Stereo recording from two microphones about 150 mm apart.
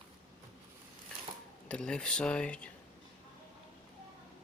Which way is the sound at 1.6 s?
5° left (ahead or behind).